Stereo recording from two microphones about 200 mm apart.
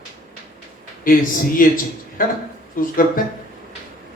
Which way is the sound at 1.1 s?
45° left (ahead or behind).